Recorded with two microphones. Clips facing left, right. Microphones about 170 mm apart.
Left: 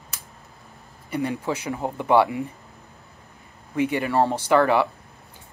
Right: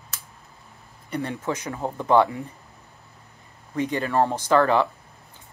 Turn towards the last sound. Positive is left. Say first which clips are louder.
# left 1 dB
turn(degrees=15)  # may be behind; listen again after turning